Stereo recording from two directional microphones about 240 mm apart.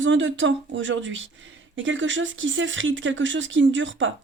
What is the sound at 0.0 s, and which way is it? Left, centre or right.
Speech, right.